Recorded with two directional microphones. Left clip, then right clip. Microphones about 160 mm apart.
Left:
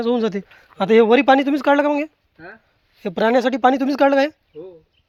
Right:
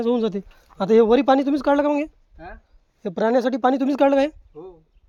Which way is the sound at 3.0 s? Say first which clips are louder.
Left 3 dB; 5° left (ahead or behind).